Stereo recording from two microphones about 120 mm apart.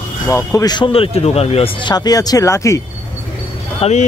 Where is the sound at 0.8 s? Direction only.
50° left (ahead or behind); by 2.8 s 25° left (ahead or behind).